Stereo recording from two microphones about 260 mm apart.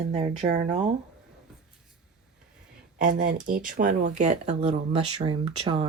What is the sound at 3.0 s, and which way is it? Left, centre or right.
Speech, right.